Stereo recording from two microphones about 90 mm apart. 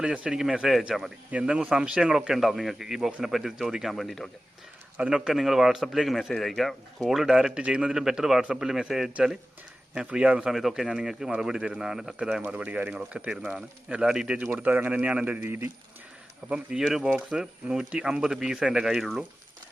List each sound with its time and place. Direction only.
0.0 s a man's voice: 10° right (ahead or behind)
4.9 s a man's voice: 10° right (ahead or behind)
16.9 s a man's voice: 5° right (ahead or behind)